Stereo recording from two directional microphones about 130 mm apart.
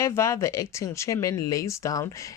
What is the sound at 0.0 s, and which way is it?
Speech, 25° left (ahead or behind).